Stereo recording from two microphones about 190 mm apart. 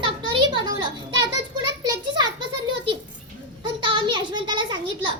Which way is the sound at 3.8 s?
25° right (ahead or behind).